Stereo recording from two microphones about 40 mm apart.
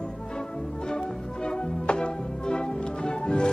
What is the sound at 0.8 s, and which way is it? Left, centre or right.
Music, left.